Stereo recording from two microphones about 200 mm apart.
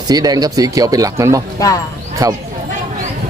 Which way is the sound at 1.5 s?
15° left (ahead or behind).